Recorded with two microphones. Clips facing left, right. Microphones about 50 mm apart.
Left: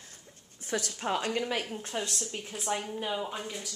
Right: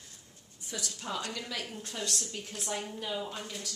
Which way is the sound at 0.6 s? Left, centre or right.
Left.